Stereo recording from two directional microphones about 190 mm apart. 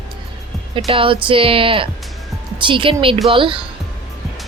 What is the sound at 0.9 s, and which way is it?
Speech, 30° right (ahead or behind).